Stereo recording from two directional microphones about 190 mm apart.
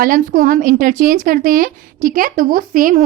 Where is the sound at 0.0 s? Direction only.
45° right (ahead or behind).